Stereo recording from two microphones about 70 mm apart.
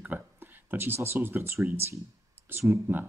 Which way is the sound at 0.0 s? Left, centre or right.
Right.